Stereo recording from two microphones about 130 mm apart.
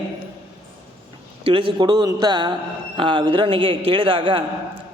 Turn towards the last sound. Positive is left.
turn(degrees=-45)  # may be behind; listen again after turning